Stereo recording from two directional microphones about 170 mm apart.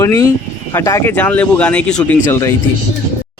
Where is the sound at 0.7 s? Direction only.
15° left (ahead or behind).